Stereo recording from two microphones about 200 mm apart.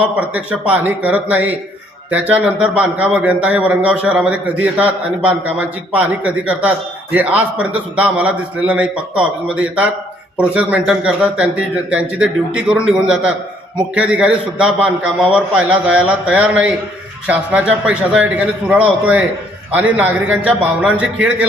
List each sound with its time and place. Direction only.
0.0 s a man's voice: 5° right (ahead or behind)